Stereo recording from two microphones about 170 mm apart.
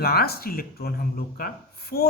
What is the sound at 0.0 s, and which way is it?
Speech, 65° left (ahead or behind).